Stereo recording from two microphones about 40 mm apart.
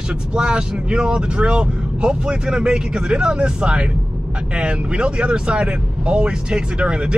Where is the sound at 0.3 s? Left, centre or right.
Right.